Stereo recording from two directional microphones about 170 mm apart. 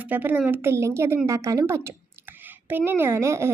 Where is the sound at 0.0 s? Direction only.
10° right (ahead or behind).